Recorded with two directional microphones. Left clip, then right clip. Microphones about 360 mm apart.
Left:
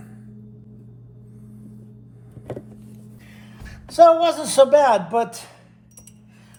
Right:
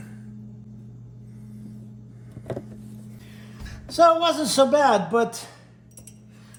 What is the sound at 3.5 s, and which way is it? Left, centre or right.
Speech, left.